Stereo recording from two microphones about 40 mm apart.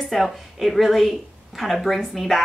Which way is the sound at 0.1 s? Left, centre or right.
Centre.